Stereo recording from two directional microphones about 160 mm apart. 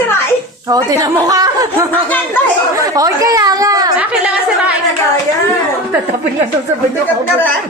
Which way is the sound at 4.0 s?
5° right (ahead or behind).